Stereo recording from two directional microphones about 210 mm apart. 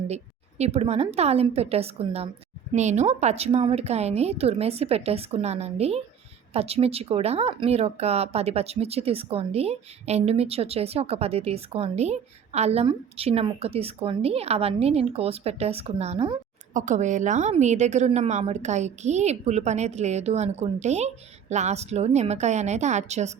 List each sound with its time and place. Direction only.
0.6 s speech: 30° right (ahead or behind)
16.7 s a woman's voice: 35° right (ahead or behind)